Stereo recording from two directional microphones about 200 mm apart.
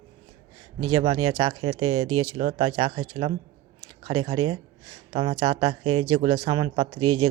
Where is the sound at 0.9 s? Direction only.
30° right (ahead or behind).